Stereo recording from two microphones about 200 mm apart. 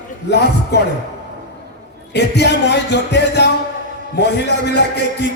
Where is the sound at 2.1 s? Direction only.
55° left (ahead or behind).